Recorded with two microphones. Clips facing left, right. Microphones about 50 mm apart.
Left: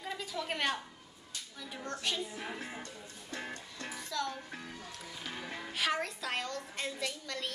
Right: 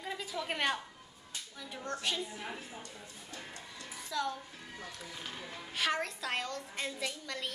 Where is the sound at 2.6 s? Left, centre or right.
Left.